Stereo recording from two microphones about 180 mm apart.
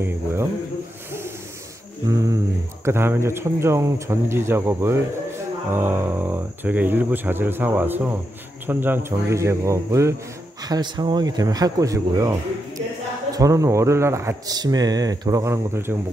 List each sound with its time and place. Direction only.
0.0 s speech: 15° right (ahead or behind)
2.0 s speech: 20° right (ahead or behind)